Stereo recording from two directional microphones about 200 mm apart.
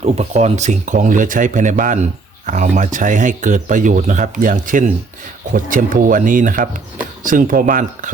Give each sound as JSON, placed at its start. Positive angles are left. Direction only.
{"t": 0.0, "sound": "speech", "side_deg": -35}